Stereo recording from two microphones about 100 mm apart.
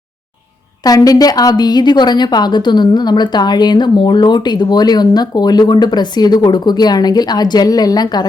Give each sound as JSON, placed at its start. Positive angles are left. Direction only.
{"t": 0.9, "sound": "a woman's voice", "side_deg": 35}